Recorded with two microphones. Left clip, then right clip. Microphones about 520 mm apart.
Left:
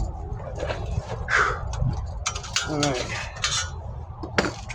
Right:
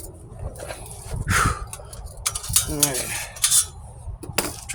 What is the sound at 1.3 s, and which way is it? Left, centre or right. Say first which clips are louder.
Dog: even; right.